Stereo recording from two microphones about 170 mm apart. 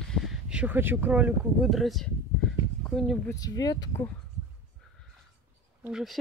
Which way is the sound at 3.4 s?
20° left (ahead or behind).